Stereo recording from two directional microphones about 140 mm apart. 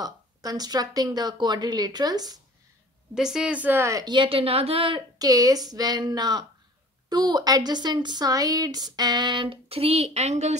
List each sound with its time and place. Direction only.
0.0 s a woman's voice: 25° right (ahead or behind)
3.2 s speech: 5° right (ahead or behind); by 5.0 s 40° right (ahead or behind)
5.2 s a woman's voice: 25° right (ahead or behind); by 10.5 s 55° right (ahead or behind)